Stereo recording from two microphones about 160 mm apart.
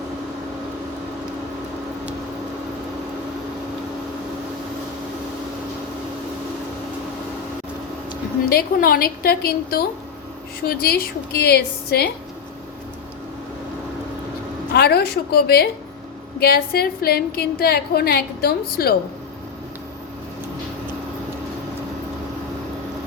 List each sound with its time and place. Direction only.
8.4 s a woman's voice: 65° left (ahead or behind)
14.7 s a woman's voice: 90° left